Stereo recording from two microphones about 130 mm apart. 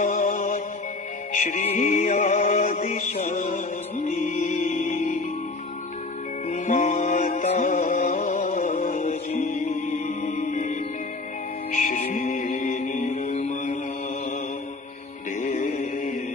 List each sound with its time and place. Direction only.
0.0 s mantra: 75° left (ahead or behind)
1.3 s music: 85° left
3.2 s music: 70° left (ahead or behind)
6.5 s music: 75° left (ahead or behind)
11.7 s music: 90° left; by 13.7 s 65° left (ahead or behind)
15.4 s chant: 75° left (ahead or behind)